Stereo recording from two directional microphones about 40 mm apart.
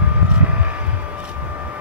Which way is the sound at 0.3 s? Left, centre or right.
Right.